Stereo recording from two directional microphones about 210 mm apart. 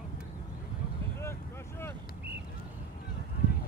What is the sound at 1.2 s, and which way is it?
Vehicle, 10° left (ahead or behind).